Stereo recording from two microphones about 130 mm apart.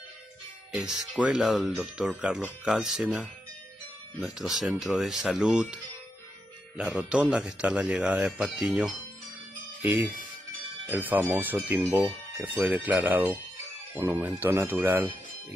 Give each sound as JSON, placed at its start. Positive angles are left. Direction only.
{"t": 0.7, "sound": "speech", "side_deg": -5}
{"t": 6.8, "sound": "speech", "side_deg": -10}